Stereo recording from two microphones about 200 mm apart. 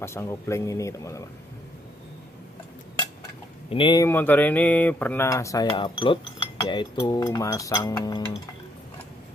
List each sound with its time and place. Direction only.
0.0 s speech: 15° left (ahead or behind)
3.7 s speech: 20° left (ahead or behind)
4.1 s speech: 10° left (ahead or behind)